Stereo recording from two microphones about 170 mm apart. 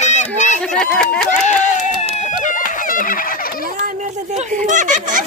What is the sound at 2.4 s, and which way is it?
Chicken, 50° left (ahead or behind).